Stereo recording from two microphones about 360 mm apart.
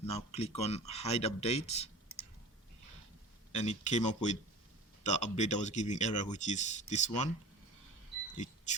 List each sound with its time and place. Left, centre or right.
0.0 s speech: centre
3.5 s speech: centre